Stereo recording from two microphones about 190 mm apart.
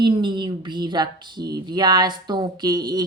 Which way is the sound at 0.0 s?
25° right (ahead or behind).